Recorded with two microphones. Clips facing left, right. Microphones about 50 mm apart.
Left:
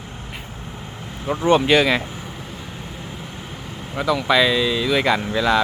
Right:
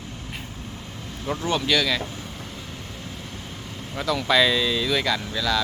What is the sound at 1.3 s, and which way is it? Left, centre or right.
Speech, left.